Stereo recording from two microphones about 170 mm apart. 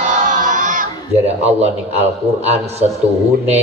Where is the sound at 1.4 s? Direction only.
40° right (ahead or behind).